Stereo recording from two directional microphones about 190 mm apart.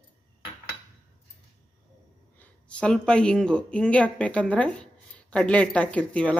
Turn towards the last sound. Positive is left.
turn(degrees=5)  # may be behind; listen again after turning